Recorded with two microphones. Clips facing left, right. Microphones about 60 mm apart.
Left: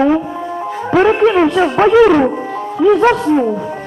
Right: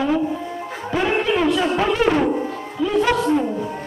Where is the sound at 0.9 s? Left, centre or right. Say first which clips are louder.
Left 9 dB; left.